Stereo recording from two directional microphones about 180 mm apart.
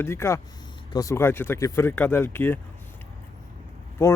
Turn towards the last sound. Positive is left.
turn(degrees=15)  # may be behind; listen again after turning